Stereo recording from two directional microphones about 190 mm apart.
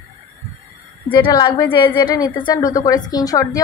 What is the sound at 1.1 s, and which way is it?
A woman's voice, 25° left (ahead or behind).